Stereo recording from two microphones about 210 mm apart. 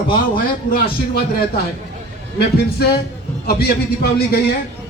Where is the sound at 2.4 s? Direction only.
50° left (ahead or behind).